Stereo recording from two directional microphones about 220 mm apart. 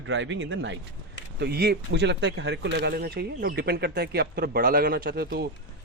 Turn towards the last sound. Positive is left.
turn(degrees=-45)  # may be behind; listen again after turning